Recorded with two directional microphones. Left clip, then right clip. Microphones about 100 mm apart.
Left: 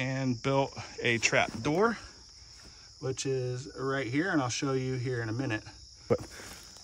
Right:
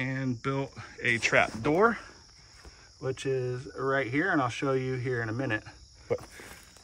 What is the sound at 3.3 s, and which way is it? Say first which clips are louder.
Speech: right 2 dB; 30° left (ahead or behind).